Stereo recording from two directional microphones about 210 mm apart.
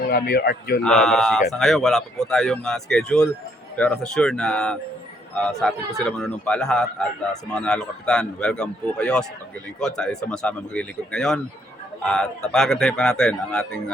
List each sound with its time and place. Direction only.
0.1 s a man's voice: 45° left (ahead or behind)
0.8 s speech: centre (ahead or behind)